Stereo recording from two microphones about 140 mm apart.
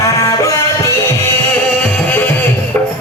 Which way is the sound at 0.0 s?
25° left (ahead or behind).